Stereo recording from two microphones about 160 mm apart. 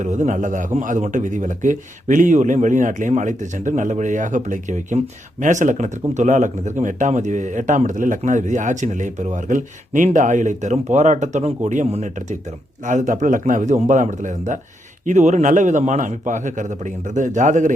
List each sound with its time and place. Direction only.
0.0 s a man's voice: 50° right (ahead or behind)